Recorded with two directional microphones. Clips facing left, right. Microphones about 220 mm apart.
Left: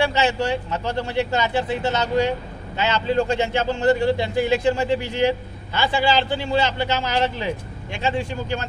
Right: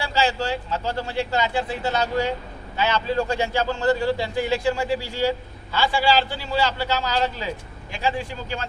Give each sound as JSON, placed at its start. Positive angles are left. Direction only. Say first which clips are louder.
{"t": 0.0, "sound": "a man's voice", "louder": "left 3 dB", "side_deg": 20}